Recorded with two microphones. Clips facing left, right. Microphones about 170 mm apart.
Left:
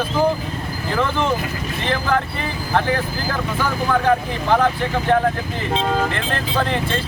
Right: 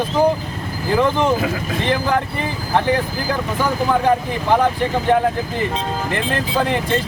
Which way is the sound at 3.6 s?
15° right (ahead or behind).